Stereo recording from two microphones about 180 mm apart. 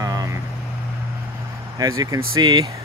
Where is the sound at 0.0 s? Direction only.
20° right (ahead or behind).